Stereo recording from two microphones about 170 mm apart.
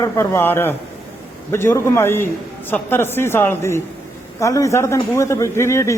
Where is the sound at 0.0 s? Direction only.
15° left (ahead or behind).